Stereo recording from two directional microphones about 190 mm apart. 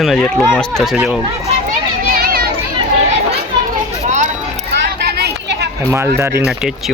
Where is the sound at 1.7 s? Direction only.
50° right (ahead or behind).